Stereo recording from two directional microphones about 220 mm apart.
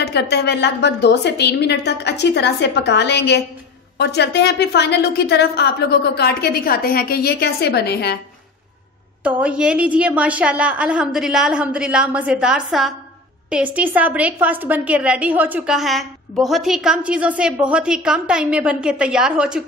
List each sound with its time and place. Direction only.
0.0 s a woman's voice: 50° left (ahead or behind)
9.2 s a woman's voice: 5° right (ahead or behind)